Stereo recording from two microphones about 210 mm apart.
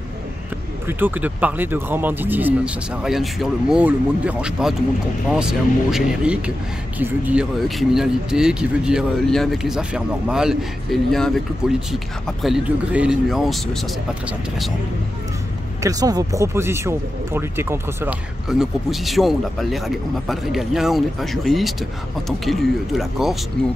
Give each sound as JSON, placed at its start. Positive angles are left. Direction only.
{"t": 0.8, "sound": "speech", "side_deg": -10}
{"t": 15.8, "sound": "speech", "side_deg": -15}